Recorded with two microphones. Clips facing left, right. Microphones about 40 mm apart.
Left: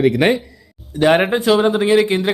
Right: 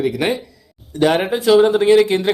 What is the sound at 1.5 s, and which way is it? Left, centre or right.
Speech, centre.